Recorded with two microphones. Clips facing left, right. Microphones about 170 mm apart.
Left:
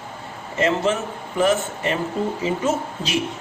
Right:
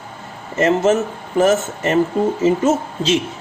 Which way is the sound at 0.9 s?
45° right (ahead or behind).